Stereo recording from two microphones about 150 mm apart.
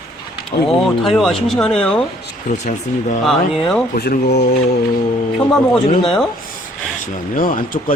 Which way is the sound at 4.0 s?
90° left.